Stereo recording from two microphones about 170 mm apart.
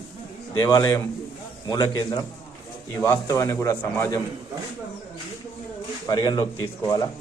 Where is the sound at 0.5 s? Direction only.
20° left (ahead or behind).